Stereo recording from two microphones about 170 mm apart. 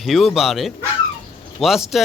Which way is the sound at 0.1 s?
Centre (ahead or behind).